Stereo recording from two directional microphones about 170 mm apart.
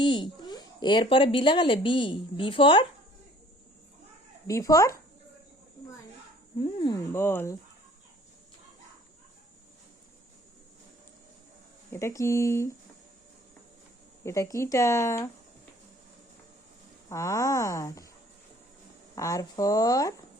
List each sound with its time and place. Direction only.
0.0 s speech: 30° left (ahead or behind)
4.4 s speech: 20° left (ahead or behind)
6.6 s speech: 25° left (ahead or behind)
7.1 s speech: 15° left (ahead or behind)
11.9 s speech: 15° left (ahead or behind)
14.3 s speech: 20° left (ahead or behind)
17.1 s speech: 15° left (ahead or behind)
19.1 s speech: 20° left (ahead or behind)